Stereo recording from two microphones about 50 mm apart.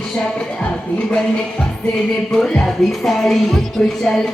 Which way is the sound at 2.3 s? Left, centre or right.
Centre.